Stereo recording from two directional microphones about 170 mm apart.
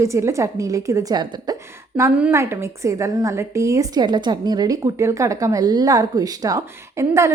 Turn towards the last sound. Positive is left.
turn(degrees=-15)  # may be behind; listen again after turning